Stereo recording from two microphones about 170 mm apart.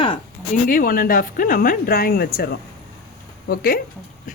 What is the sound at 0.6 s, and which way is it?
Speech, 55° left (ahead or behind).